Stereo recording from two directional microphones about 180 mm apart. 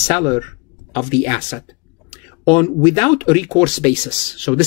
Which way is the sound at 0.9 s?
30° left (ahead or behind).